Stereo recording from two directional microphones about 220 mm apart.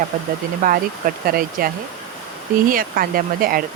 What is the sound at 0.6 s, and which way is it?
Speech, 40° right (ahead or behind).